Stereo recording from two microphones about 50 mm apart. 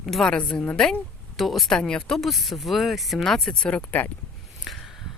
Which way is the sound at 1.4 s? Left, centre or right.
Centre.